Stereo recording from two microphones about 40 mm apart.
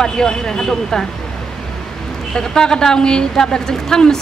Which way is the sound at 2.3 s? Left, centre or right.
Centre.